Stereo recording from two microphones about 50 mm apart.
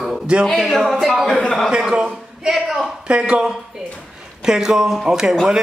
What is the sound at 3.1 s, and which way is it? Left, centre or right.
Speech, right.